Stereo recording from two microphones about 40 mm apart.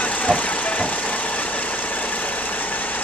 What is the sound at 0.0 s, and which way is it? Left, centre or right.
Vehicle, left.